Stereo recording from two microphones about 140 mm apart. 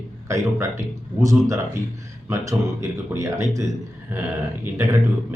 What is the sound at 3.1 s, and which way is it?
Speech, 15° right (ahead or behind).